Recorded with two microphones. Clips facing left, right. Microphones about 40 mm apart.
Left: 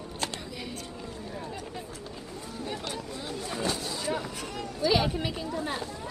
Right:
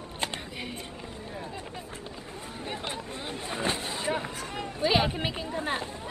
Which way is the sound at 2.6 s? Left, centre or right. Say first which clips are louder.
Even; right.